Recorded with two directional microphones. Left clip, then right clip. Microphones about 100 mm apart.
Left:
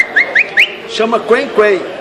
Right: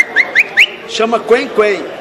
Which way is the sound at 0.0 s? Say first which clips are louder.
Even; 15° left (ahead or behind).